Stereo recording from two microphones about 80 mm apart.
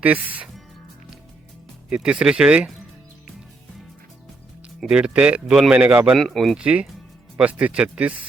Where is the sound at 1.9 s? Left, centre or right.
Centre.